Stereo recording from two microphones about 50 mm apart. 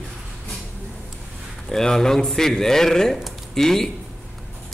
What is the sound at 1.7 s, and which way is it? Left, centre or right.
Speech, centre.